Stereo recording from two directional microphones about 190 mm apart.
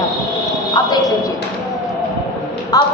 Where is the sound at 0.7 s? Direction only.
20° left (ahead or behind).